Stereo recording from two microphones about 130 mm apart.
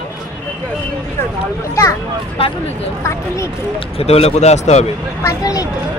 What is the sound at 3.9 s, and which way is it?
Speech, 50° left (ahead or behind).